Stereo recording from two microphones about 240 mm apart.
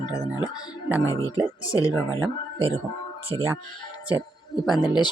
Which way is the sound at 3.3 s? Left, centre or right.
Centre.